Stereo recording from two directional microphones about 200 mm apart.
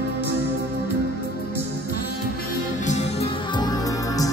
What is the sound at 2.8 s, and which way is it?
Music, 35° left (ahead or behind).